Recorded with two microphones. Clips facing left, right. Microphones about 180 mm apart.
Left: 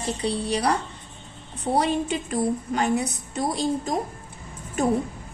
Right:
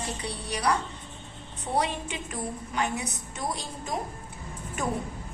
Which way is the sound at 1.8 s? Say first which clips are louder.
Left 6 dB; 35° left (ahead or behind).